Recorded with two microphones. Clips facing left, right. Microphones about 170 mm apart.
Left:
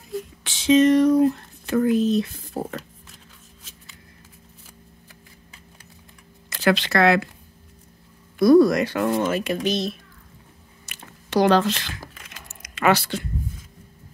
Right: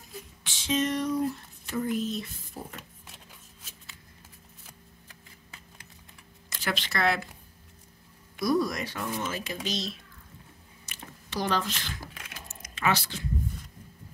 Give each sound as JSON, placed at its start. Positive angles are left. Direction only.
{"t": 0.4, "sound": "a sound", "side_deg": 80}
{"t": 6.5, "sound": "speech", "side_deg": 75}
{"t": 8.4, "sound": "speech", "side_deg": 65}
{"t": 10.9, "sound": "squish", "side_deg": 80}
{"t": 12.1, "sound": "a sound", "side_deg": -5}
{"t": 12.7, "sound": "speech", "side_deg": 70}